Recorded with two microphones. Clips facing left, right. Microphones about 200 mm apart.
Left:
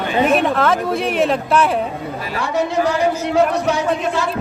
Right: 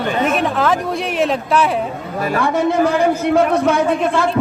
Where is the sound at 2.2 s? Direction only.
50° right (ahead or behind).